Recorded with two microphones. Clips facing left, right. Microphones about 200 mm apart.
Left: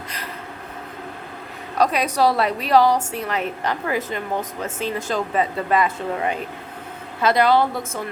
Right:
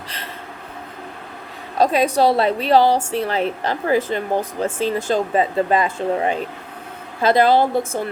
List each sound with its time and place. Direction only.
1.8 s a woman's voice: 25° right (ahead or behind)